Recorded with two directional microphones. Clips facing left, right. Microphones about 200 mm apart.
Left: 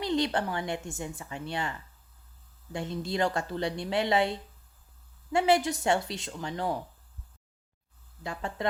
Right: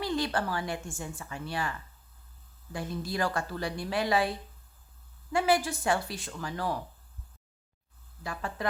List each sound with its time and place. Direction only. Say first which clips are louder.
0.0 s a woman's voice: left 2 dB; 20° left (ahead or behind)
8.2 s a woman's voice: left 1 dB; 25° left (ahead or behind)